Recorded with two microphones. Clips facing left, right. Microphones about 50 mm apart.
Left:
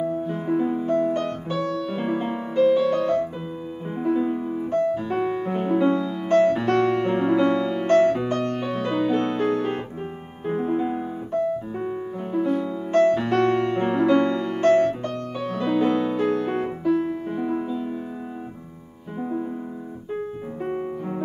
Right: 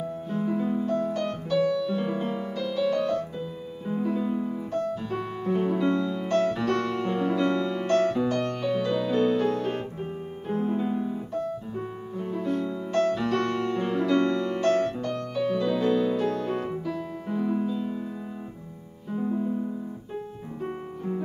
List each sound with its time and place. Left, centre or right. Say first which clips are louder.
0.3 s music: even; left
1.6 s music: right 3 dB; left
2.0 s music: left 3 dB; left
3.9 s piano: left 4 dB; left
5.5 s music: left 2 dB; left
7.3 s music: left 4 dB; left
12.3 s music: left 5 dB; centre
12.9 s music: left 6 dB; left
19.2 s music: even; left